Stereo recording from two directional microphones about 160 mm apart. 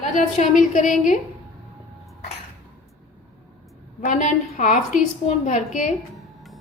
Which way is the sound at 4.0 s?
50° left (ahead or behind).